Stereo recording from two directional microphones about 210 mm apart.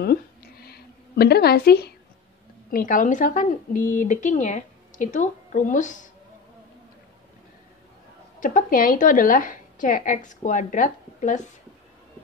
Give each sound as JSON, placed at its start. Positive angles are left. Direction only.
{"t": 0.0, "sound": "a sound", "side_deg": 50}
{"t": 2.7, "sound": "speech", "side_deg": 40}
{"t": 8.4, "sound": "speech", "side_deg": 40}